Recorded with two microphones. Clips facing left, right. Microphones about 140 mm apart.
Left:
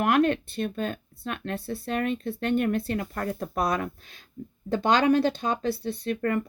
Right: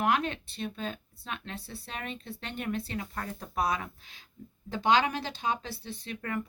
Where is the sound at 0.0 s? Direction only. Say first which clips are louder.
Left 7 dB; 55° left (ahead or behind).